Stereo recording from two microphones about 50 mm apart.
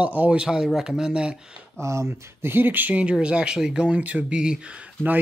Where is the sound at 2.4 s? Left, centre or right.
Right.